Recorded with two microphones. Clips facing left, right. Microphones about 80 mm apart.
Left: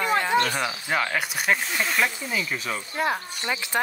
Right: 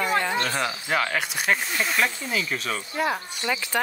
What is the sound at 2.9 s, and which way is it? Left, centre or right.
Speech, left.